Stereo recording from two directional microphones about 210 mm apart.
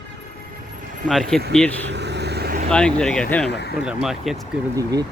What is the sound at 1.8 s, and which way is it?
Vehicle, 55° right (ahead or behind).